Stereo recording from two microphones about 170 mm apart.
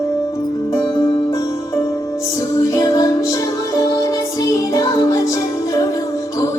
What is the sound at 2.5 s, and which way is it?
Music, 20° left (ahead or behind).